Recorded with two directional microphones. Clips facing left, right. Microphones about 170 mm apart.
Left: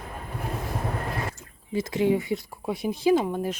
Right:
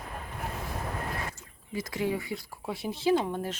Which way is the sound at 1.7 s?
25° left (ahead or behind).